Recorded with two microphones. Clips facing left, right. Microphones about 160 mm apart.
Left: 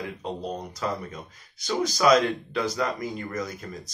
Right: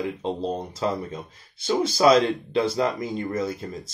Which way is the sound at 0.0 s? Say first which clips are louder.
Right 5 dB; 25° right (ahead or behind).